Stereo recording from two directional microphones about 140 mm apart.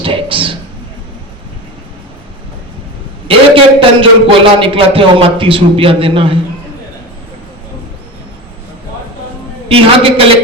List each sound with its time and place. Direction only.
0.0 s a sound: 40° right (ahead or behind)
3.2 s a man's voice: 40° right (ahead or behind)
9.6 s a man's voice: 40° right (ahead or behind)